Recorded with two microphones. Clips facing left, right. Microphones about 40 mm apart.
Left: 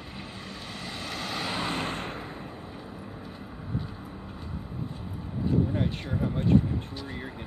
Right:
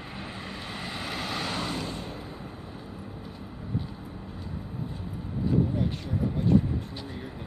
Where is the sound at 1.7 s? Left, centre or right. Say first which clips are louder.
Left 2 dB; left.